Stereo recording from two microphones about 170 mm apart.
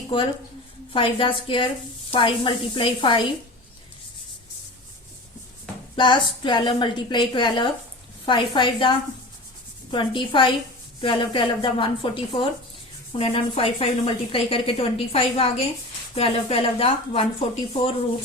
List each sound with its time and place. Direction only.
0.9 s a woman's voice: 30° left (ahead or behind)
6.0 s a woman's voice: 30° left (ahead or behind)